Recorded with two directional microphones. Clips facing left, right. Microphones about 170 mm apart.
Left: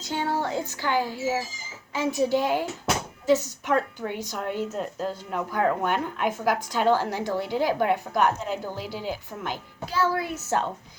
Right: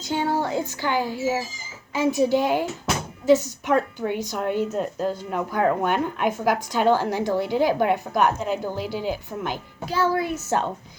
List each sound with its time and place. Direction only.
0.0 s a woman's voice: 15° right (ahead or behind)